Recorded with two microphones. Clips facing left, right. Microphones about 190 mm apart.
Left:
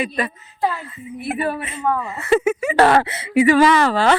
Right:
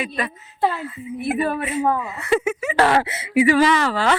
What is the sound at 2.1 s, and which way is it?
Speech, 45° left (ahead or behind).